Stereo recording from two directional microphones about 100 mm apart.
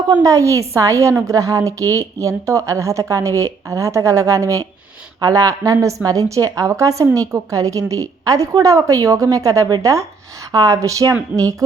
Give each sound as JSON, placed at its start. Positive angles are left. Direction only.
{"t": 0.1, "sound": "a woman's voice", "side_deg": -35}